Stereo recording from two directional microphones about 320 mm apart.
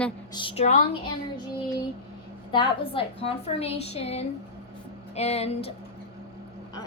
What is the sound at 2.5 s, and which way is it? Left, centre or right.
A woman's voice, centre.